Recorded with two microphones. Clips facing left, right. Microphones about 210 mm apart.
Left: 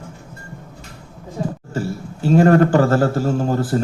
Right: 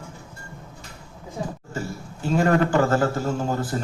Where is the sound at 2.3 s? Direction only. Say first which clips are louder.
Left 6 dB; 45° left (ahead or behind).